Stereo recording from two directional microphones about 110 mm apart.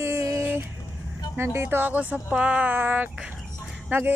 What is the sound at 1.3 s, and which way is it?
Speech, 25° right (ahead or behind).